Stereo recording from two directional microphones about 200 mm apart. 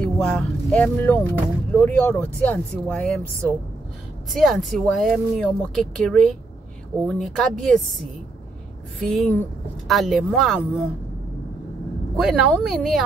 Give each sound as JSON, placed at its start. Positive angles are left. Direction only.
{"t": 0.0, "sound": "speech", "side_deg": 5}
{"t": 9.1, "sound": "speech", "side_deg": 5}
{"t": 12.2, "sound": "speech", "side_deg": 0}